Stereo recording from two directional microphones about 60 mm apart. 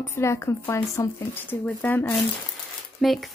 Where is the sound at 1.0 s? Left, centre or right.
Left.